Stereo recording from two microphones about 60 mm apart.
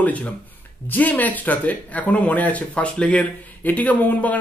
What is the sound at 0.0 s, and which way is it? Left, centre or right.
Speech, left.